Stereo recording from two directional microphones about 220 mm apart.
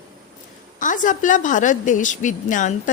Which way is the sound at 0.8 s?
35° left (ahead or behind).